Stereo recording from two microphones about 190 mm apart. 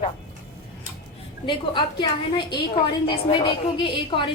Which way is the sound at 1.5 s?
25° left (ahead or behind).